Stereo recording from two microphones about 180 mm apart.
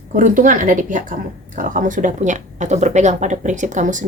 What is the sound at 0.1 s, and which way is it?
A woman's voice, 50° right (ahead or behind).